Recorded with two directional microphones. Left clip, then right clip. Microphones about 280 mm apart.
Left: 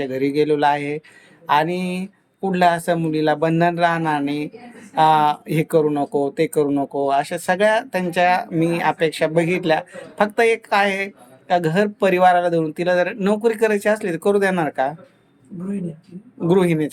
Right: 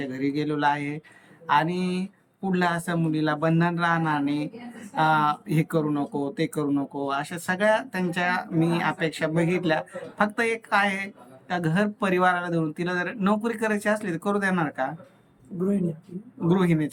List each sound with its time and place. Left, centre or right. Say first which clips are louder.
0.0 s speech: left 9 dB; centre
16.5 s speech: left 7 dB; centre